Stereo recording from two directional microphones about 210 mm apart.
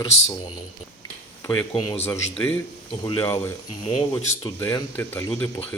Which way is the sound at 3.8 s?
30° left (ahead or behind).